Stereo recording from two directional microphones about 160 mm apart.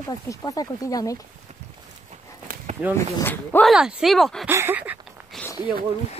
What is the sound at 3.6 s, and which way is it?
Speech, 5° right (ahead or behind).